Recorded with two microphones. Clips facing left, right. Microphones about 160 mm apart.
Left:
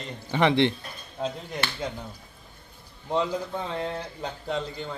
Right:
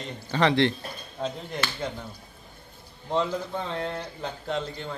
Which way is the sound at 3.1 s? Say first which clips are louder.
Even; 5° left (ahead or behind).